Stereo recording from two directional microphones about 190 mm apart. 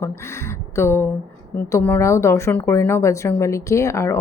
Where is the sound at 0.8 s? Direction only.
10° left (ahead or behind).